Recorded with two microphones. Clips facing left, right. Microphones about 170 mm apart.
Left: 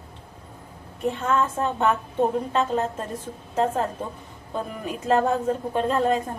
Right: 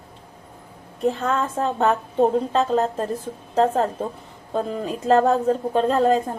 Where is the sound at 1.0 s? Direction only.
35° right (ahead or behind).